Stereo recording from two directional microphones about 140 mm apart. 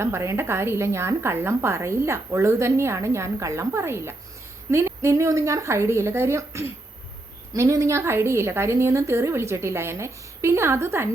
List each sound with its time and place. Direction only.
0.0 s a woman's voice: 20° right (ahead or behind)